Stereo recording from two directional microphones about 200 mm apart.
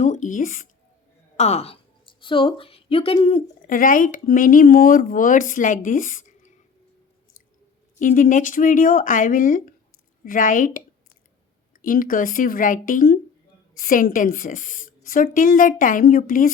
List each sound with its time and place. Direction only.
0.0 s speech: 40° left (ahead or behind)
3.7 s speech: 45° left (ahead or behind)
7.9 s a woman's voice: 40° left (ahead or behind)